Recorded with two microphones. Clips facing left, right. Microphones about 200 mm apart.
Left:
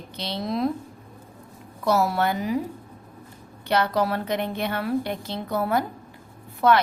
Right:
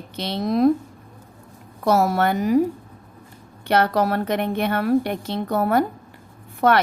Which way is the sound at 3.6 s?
55° right (ahead or behind).